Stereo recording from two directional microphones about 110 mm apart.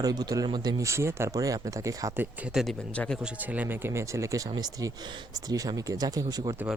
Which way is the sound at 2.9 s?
10° left (ahead or behind).